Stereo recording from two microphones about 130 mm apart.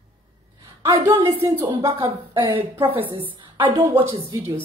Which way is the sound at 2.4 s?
40° right (ahead or behind).